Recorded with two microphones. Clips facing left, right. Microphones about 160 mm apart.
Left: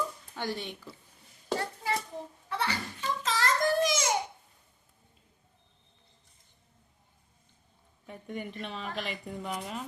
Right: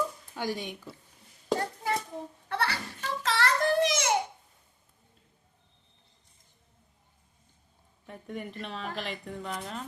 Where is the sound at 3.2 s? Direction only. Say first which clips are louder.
Right 2 dB; 65° right (ahead or behind).